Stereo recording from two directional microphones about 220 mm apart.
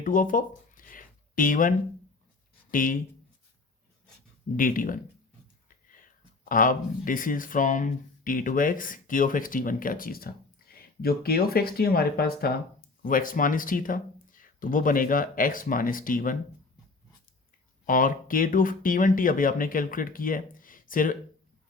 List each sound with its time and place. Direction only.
0.0 s a sound: 40° left (ahead or behind)
2.7 s speech: 40° left (ahead or behind)
4.5 s speech: 40° left (ahead or behind)
6.4 s speech: 40° left (ahead or behind)
17.8 s speech: 40° left (ahead or behind)